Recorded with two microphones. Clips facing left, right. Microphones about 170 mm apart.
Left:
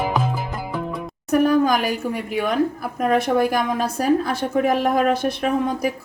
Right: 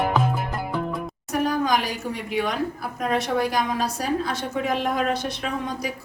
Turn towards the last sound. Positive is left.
turn(degrees=50)  # may be behind; listen again after turning